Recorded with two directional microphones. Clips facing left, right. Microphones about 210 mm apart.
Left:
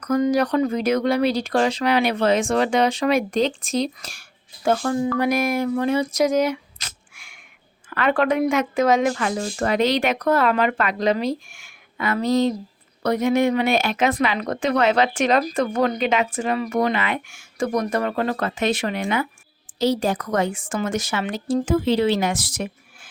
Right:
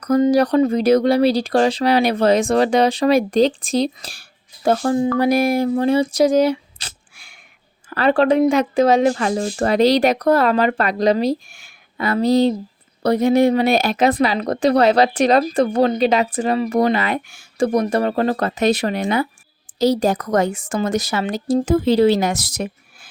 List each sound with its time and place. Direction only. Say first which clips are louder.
0.0 s speech: right 4 dB; 35° right (ahead or behind)